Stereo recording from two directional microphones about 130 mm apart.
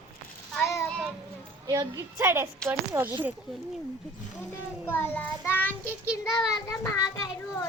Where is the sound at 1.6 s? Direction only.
25° right (ahead or behind).